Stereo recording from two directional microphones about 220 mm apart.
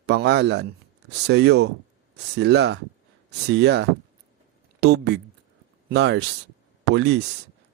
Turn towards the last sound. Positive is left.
turn(degrees=-50)  # may be behind; listen again after turning